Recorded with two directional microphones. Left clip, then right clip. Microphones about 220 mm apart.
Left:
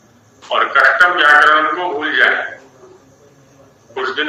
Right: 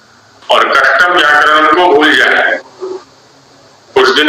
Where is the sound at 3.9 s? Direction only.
50° right (ahead or behind).